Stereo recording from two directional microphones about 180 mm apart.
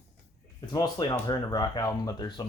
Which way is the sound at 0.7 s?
20° left (ahead or behind).